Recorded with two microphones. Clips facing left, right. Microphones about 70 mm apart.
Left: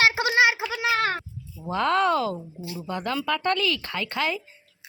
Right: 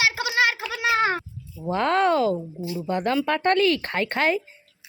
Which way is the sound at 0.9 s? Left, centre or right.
Centre.